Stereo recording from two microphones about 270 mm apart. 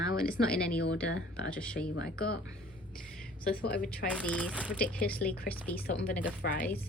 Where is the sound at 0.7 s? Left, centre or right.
Left.